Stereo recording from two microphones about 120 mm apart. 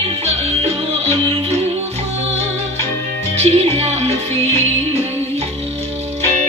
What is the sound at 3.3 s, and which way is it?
Music, 60° right (ahead or behind).